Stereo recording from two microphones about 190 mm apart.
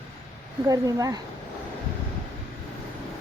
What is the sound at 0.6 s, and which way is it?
Speech, 20° right (ahead or behind).